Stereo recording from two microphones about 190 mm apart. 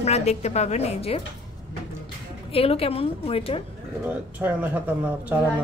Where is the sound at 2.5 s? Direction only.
30° left (ahead or behind).